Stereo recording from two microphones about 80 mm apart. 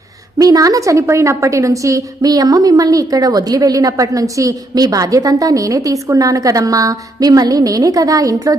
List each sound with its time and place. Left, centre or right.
0.3 s a woman's voice: right